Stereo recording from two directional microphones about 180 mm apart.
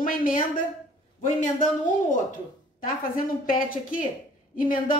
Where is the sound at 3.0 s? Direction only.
50° left (ahead or behind).